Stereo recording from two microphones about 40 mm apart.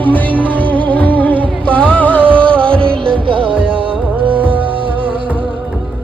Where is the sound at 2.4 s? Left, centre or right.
Left.